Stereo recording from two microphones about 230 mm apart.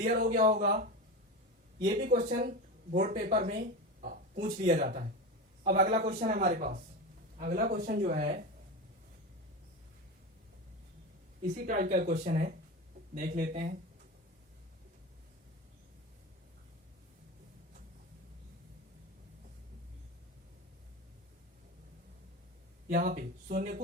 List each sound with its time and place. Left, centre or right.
0.0 s speech: right
4.0 s a sound: right
4.5 s speech: right
11.4 s speech: right
22.9 s speech: right